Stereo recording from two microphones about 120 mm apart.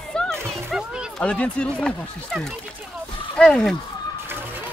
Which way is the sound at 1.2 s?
10° left (ahead or behind).